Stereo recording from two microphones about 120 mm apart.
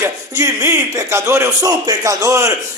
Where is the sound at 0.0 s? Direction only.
20° right (ahead or behind).